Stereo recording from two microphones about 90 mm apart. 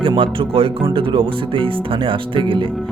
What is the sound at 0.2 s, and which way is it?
Speech, 80° right.